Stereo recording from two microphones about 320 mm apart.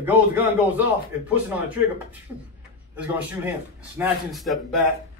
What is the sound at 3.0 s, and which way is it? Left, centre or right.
Speech, centre.